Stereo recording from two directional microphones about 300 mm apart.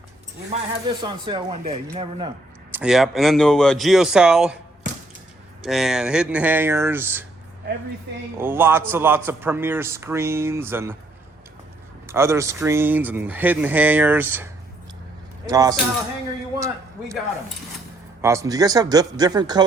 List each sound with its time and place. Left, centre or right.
1.0 s a man's voice: centre
2.7 s speech: centre
5.6 s speech: centre
8.4 s a man's voice: centre
12.0 s a man's voice: centre
16.6 s a sound: centre
18.2 s a man's voice: centre